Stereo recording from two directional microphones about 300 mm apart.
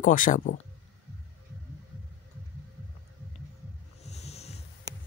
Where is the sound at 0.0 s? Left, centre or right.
Left.